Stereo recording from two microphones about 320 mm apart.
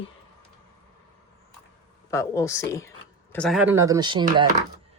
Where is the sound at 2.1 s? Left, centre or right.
Centre.